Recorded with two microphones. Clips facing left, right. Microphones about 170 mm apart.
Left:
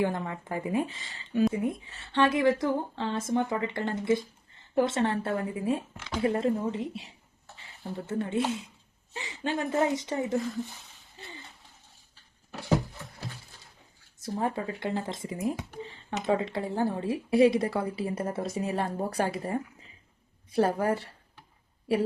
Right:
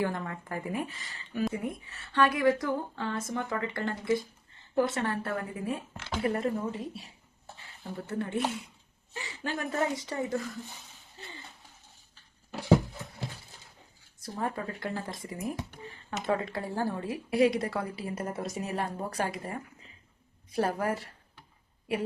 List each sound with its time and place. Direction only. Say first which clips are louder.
0.0 s speech: left 3 dB; 20° left (ahead or behind)
14.2 s speech: left 4 dB; 25° left (ahead or behind)